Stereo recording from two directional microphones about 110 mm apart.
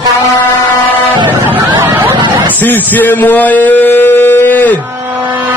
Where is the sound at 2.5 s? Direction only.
15° left (ahead or behind).